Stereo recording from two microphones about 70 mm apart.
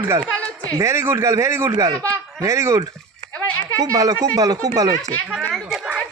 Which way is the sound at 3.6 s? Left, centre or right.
Right.